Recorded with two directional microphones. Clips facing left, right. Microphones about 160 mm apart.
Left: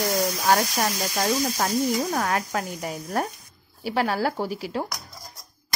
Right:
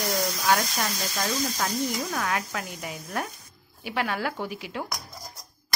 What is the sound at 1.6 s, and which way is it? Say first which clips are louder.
Speech: left 5 dB; 40° left (ahead or behind).